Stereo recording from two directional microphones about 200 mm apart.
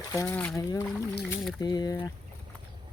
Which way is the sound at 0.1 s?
15° left (ahead or behind).